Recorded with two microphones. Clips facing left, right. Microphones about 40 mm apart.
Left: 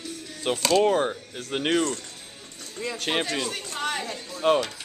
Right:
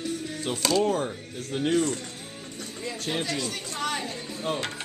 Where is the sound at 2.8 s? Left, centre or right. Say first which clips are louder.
Left 4 dB; left.